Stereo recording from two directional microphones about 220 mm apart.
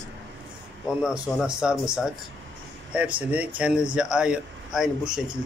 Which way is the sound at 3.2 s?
5° right (ahead or behind).